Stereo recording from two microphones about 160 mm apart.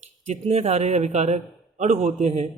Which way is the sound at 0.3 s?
40° right (ahead or behind).